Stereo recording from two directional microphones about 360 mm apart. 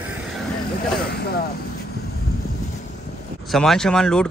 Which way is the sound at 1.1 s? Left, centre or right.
Left.